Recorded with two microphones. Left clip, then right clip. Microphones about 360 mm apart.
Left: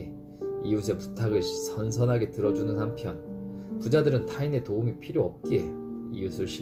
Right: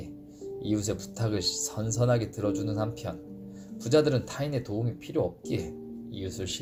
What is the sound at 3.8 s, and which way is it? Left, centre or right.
Speech, right.